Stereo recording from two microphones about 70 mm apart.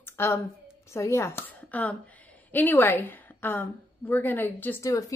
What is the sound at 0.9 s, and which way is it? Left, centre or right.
Speech, left.